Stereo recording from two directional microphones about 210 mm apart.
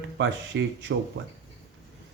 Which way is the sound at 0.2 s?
60° right (ahead or behind).